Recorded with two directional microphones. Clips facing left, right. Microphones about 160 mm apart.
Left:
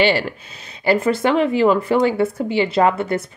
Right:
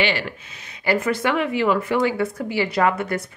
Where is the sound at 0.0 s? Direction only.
35° left (ahead or behind).